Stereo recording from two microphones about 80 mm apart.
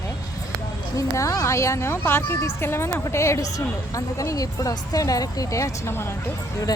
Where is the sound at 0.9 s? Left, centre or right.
Left.